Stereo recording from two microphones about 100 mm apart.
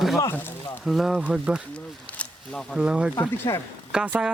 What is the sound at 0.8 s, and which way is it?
Speech, centre (ahead or behind).